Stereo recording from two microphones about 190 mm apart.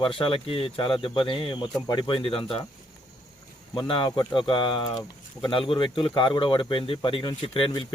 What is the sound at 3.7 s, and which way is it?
Speech, 25° left (ahead or behind).